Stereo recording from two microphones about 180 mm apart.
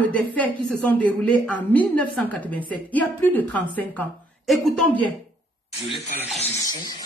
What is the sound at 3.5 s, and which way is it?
A woman's voice, 10° left (ahead or behind).